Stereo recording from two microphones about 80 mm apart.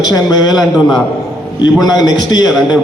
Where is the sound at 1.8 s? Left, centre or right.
Left.